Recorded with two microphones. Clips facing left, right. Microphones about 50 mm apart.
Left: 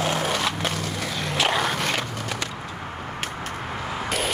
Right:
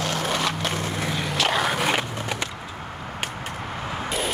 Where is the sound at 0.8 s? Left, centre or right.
Right.